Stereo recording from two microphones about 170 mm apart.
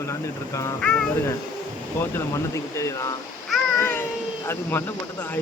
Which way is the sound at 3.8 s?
15° left (ahead or behind).